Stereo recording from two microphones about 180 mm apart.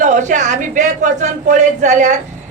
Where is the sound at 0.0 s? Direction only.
45° right (ahead or behind).